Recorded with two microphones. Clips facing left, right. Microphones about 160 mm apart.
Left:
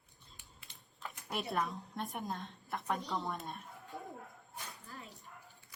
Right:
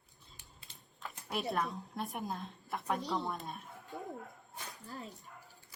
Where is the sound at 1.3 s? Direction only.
Centre (ahead or behind).